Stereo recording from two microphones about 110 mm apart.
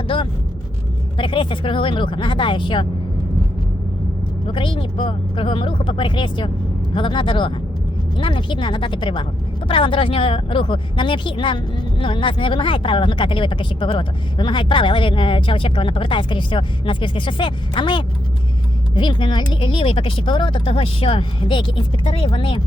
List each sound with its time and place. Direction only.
0.1 s speech: 50° left (ahead or behind)
4.5 s speech: 50° left (ahead or behind)